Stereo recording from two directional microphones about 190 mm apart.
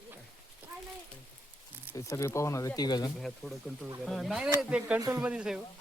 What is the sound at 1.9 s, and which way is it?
Speech, 15° left (ahead or behind).